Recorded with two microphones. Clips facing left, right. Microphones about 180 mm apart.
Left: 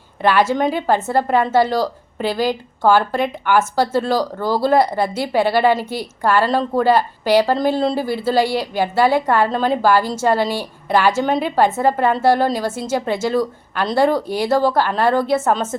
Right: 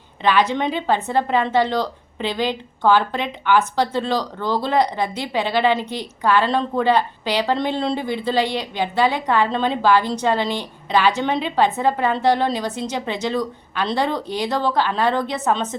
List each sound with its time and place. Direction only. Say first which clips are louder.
0.3 s a woman's voice: left 3 dB; 10° left (ahead or behind)